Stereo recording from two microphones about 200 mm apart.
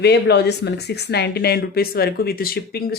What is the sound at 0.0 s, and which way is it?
Speech, 55° left (ahead or behind).